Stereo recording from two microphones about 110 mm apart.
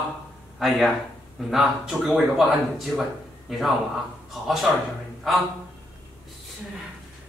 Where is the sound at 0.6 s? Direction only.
Centre (ahead or behind).